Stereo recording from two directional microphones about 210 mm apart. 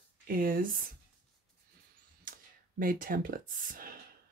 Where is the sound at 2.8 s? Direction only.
40° right (ahead or behind).